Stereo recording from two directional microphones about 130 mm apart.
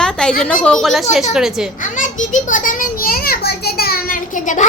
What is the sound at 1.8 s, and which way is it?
A child's voice, 90° left.